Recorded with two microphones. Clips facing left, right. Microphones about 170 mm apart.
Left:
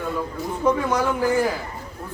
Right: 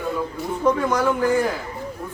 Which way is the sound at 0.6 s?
10° left (ahead or behind).